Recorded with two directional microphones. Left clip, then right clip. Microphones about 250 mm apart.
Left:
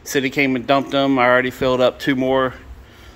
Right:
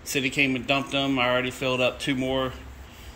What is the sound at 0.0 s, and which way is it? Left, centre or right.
Speech, centre.